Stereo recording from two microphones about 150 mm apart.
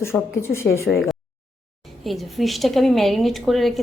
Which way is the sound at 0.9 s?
Centre (ahead or behind).